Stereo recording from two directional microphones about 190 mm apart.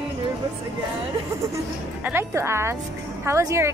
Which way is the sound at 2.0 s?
10° right (ahead or behind).